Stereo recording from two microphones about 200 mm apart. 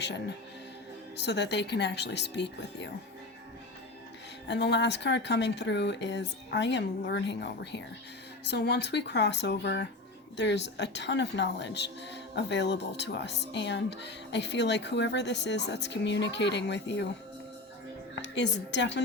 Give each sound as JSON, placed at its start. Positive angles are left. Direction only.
{"t": 1.2, "sound": "speech", "side_deg": 60}
{"t": 4.4, "sound": "speech", "side_deg": 60}
{"t": 18.1, "sound": "a woman's voice", "side_deg": 60}